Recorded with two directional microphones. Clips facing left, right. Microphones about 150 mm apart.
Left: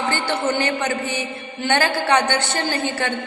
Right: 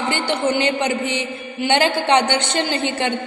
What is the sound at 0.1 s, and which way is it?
A woman's voice, 15° right (ahead or behind).